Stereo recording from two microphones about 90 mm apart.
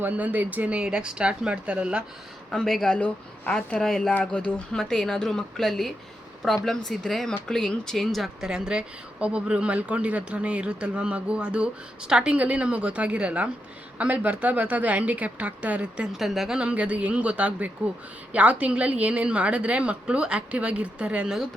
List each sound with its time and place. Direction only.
0.0 s a woman's voice: 20° right (ahead or behind)
2.5 s a woman's voice: 5° left (ahead or behind); by 16.0 s 15° right (ahead or behind)
16.1 s a woman's voice: centre (ahead or behind)